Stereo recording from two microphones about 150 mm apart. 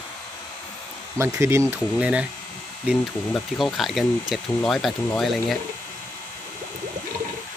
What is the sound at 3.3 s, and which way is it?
Speech, centre (ahead or behind).